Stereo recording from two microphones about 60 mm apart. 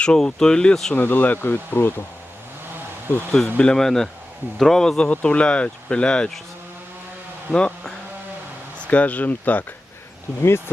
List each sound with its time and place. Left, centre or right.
0.0 s speech: centre
0.9 s speech: left
3.3 s speech: centre
7.5 s speech: centre